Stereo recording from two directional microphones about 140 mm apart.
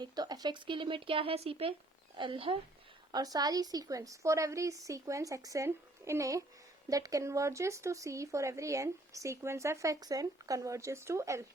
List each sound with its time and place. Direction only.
0.0 s speech: 30° right (ahead or behind)
3.1 s speech: 25° right (ahead or behind)